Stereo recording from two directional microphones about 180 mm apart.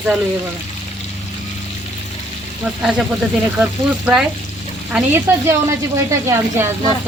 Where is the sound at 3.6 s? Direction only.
5° right (ahead or behind).